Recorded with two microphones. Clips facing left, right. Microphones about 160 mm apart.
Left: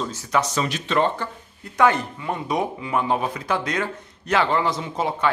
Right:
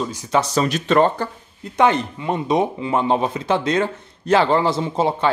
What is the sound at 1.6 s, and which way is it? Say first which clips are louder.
Speech: right 2 dB; 20° right (ahead or behind).